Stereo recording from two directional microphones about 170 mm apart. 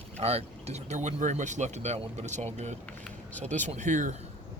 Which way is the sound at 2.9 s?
10° left (ahead or behind).